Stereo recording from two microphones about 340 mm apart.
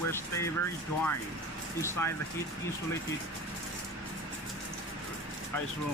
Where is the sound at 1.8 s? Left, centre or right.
Centre.